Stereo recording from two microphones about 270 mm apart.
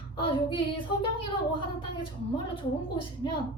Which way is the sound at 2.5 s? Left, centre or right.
Centre.